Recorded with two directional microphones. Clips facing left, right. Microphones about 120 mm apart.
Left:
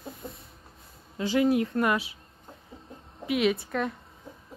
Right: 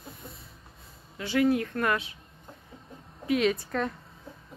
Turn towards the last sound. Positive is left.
turn(degrees=5)  # may be behind; listen again after turning